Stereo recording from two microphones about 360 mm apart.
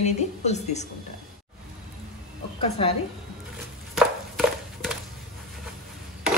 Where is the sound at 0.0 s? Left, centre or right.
Centre.